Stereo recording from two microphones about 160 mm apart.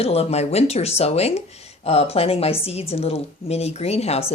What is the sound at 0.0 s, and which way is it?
Speech, 40° left (ahead or behind).